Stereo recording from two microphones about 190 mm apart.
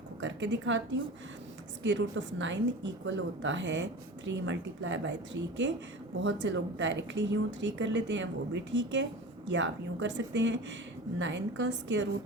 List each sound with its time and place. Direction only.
0.2 s a woman's voice: 70° right (ahead or behind)